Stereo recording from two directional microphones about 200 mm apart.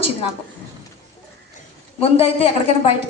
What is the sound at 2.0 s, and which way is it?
Speech, 30° left (ahead or behind).